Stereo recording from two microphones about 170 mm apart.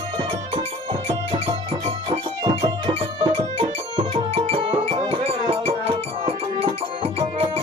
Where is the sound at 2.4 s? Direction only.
25° right (ahead or behind).